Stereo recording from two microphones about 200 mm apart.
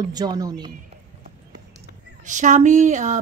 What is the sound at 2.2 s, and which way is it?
A woman's voice, 40° right (ahead or behind).